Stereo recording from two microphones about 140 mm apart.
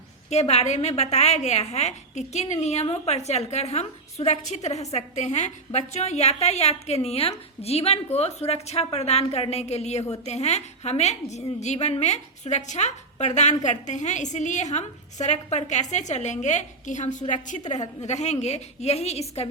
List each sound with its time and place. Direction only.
0.3 s a woman's voice: 50° left (ahead or behind)